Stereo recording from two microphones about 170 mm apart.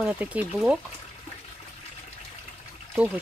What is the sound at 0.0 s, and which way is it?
Speech, 10° right (ahead or behind).